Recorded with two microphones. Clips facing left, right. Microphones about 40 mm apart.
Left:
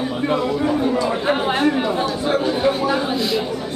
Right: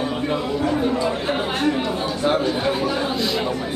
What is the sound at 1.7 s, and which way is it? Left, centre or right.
Chatter, centre.